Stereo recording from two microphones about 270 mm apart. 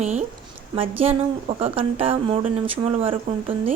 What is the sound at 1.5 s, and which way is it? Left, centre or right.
Speech, right.